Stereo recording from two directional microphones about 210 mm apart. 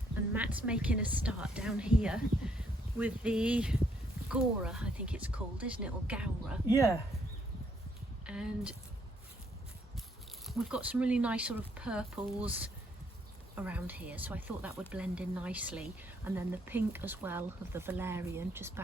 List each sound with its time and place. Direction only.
0.3 s speech: 5° right (ahead or behind)
6.7 s speech: 15° left (ahead or behind)
8.3 s speech: 5° right (ahead or behind)
10.4 s speech: centre (ahead or behind)